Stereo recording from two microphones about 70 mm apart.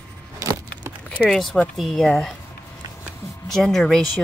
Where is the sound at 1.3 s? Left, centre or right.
Centre.